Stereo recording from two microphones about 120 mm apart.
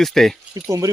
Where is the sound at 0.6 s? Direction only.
25° right (ahead or behind).